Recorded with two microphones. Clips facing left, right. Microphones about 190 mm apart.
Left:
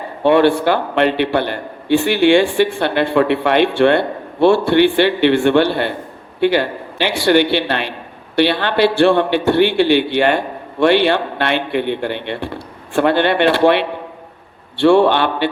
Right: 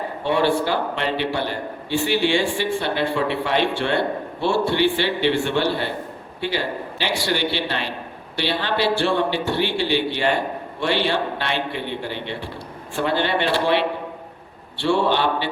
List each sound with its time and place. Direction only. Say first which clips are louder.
0.2 s a man's voice: left 8 dB; 60° left (ahead or behind)